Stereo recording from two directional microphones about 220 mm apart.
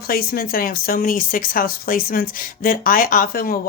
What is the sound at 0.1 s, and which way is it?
A woman's voice, 40° left (ahead or behind).